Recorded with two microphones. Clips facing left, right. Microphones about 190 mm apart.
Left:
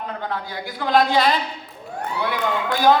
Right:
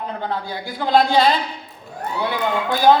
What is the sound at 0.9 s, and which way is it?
Speech, 25° right (ahead or behind).